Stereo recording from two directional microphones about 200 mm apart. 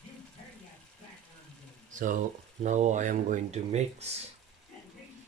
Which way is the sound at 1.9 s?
40° right (ahead or behind).